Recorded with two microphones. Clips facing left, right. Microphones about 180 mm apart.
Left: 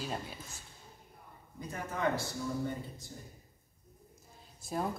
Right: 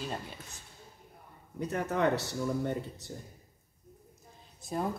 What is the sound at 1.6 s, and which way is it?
Speech, 75° right (ahead or behind).